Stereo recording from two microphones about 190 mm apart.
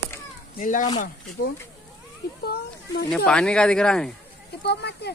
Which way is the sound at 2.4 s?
60° left (ahead or behind).